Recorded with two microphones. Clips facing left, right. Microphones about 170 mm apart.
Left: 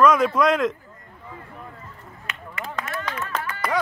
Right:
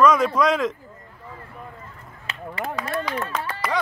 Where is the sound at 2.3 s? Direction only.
30° right (ahead or behind).